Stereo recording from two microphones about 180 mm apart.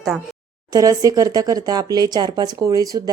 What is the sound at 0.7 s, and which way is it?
Speech, 20° right (ahead or behind).